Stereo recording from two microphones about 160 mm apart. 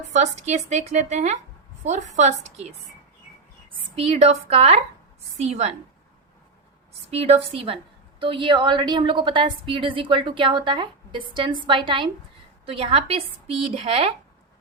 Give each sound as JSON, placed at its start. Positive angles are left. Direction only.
{"t": 0.1, "sound": "a woman's voice", "side_deg": -45}
{"t": 3.9, "sound": "a woman's voice", "side_deg": -40}
{"t": 7.1, "sound": "a woman's voice", "side_deg": -40}